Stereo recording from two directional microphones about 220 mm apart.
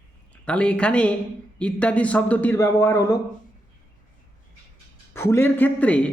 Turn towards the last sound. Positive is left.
turn(degrees=5)  # may be behind; listen again after turning